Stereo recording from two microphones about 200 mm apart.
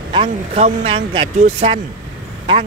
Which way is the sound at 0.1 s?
30° right (ahead or behind).